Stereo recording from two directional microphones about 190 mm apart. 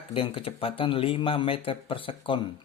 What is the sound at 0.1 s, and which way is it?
Speech, 30° left (ahead or behind).